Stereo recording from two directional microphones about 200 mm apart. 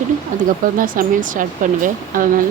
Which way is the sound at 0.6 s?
45° right (ahead or behind).